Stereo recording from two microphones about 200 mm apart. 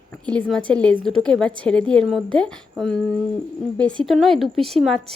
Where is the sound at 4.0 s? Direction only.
Centre (ahead or behind).